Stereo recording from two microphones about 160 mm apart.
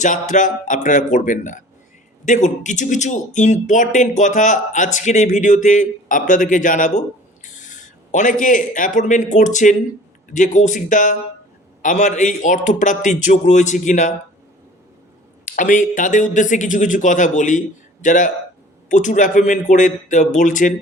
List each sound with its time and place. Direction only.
0.0 s a man's voice: 50° left (ahead or behind)
15.4 s speech: 55° left (ahead or behind)